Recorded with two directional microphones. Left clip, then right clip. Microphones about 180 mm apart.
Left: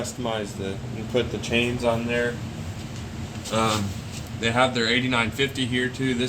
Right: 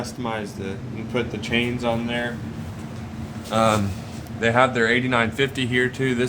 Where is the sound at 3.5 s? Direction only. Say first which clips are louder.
Right 4 dB; 55° right (ahead or behind).